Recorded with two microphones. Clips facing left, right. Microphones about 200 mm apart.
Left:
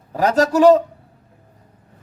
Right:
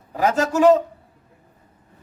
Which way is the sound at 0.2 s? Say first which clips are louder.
Left 3 dB; 35° left (ahead or behind).